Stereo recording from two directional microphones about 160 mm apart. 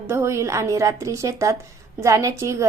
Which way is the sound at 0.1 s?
15° right (ahead or behind).